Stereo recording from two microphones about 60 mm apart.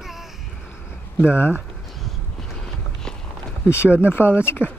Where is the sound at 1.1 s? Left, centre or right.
Left.